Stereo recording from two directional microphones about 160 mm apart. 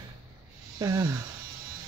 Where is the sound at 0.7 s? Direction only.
25° right (ahead or behind).